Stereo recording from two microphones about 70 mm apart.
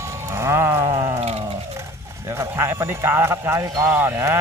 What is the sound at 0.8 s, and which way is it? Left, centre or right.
Sheep, right.